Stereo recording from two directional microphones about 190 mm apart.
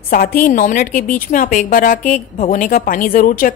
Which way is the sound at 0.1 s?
50° left (ahead or behind).